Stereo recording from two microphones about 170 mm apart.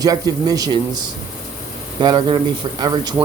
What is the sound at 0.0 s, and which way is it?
Speech, 20° right (ahead or behind).